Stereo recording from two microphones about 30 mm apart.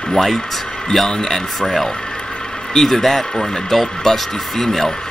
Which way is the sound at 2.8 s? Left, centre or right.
Centre.